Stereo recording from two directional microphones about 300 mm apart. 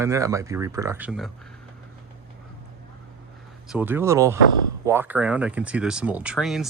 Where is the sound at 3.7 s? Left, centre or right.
Centre.